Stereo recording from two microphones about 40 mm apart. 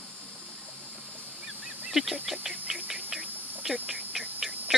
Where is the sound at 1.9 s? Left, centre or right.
Centre.